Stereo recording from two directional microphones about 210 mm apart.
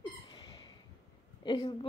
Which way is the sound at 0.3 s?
20° left (ahead or behind).